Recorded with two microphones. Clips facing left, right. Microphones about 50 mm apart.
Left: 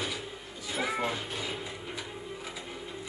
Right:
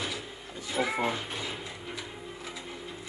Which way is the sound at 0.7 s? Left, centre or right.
Centre.